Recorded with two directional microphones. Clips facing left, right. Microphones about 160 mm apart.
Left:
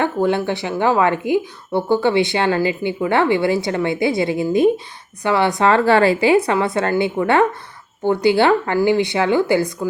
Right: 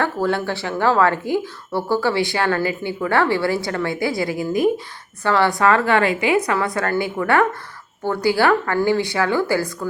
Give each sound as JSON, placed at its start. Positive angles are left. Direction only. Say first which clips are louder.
{"t": 0.0, "sound": "speech", "louder": "left 3 dB", "side_deg": 20}